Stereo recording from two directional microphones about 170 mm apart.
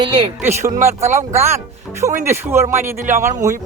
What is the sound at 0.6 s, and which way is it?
Speech, 45° right (ahead or behind).